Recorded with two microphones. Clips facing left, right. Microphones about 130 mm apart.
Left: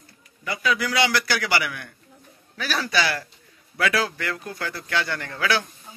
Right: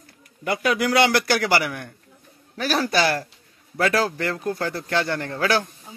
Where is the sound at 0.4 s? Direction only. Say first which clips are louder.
Right 3 dB; 55° right (ahead or behind).